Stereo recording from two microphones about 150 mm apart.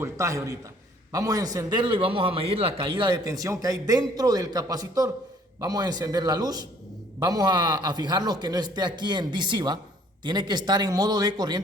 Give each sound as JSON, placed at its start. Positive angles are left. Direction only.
{"t": 0.0, "sound": "a man's voice", "side_deg": -20}